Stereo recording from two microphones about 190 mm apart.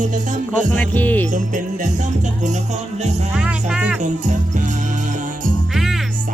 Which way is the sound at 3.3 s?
5° right (ahead or behind).